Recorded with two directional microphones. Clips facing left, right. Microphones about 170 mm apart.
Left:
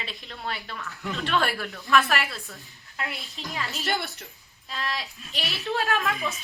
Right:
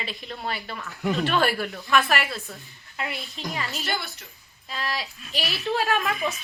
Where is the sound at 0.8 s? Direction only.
20° right (ahead or behind).